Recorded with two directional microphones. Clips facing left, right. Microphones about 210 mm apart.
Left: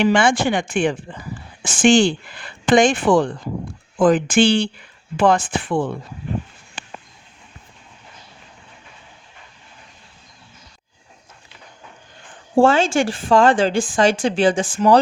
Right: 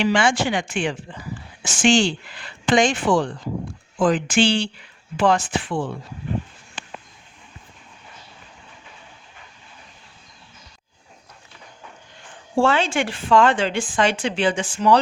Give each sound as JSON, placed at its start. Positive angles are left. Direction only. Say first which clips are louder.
{"t": 0.0, "sound": "speech", "louder": "left 3 dB", "side_deg": 55}
{"t": 12.5, "sound": "speech", "louder": "left 5 dB", "side_deg": 45}